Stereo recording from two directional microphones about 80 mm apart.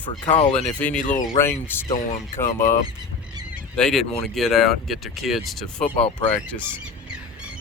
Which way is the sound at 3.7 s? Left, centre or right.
Centre.